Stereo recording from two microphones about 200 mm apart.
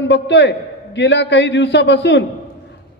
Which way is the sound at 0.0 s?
60° left (ahead or behind).